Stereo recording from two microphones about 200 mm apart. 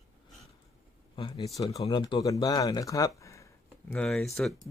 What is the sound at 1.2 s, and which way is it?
Speech, 20° left (ahead or behind).